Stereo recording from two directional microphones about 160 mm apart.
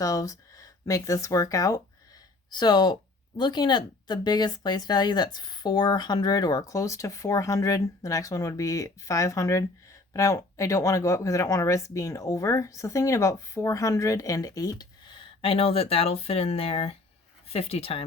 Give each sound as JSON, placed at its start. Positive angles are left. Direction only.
{"t": 0.0, "sound": "speech", "side_deg": 20}